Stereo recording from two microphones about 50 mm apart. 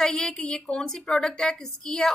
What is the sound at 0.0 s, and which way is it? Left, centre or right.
A woman's voice, centre.